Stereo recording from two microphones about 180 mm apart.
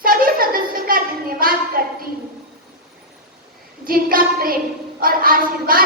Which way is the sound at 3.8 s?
55° right (ahead or behind).